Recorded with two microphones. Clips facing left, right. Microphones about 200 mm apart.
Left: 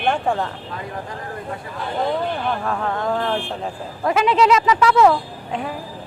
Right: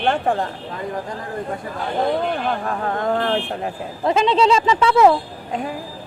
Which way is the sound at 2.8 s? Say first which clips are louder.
Right 1 dB; 45° right (ahead or behind).